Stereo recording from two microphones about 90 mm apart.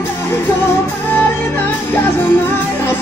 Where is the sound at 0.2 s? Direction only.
25° left (ahead or behind).